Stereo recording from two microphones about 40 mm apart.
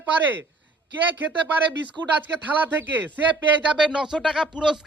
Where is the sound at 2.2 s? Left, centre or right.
Right.